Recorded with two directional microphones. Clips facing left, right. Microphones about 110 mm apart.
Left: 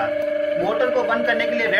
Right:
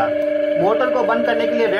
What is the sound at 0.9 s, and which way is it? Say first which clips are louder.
Speech: right 3 dB; 40° right (ahead or behind).